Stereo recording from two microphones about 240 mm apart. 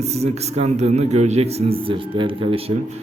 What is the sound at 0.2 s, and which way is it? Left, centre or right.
A man's voice, right.